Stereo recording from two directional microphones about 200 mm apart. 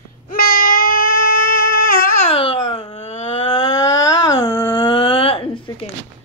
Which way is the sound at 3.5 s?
15° left (ahead or behind).